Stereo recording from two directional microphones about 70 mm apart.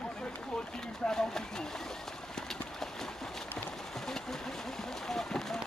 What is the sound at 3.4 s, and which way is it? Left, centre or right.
Clip-clop, centre.